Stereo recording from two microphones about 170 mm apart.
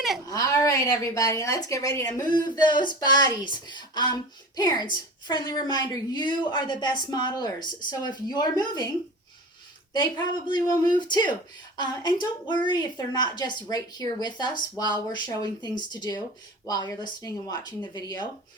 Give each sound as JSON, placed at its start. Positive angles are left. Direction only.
{"t": 0.3, "sound": "a woman's voice", "side_deg": 20}
{"t": 9.9, "sound": "a woman's voice", "side_deg": 25}